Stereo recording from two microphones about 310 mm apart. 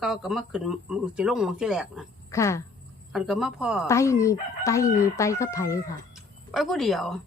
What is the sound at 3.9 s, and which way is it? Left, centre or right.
A woman's voice, centre.